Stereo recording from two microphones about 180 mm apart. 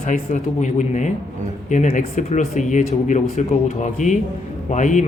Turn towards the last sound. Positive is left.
turn(degrees=45)  # may be behind; listen again after turning